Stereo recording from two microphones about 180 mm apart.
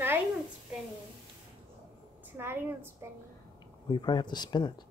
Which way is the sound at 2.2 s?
15° right (ahead or behind).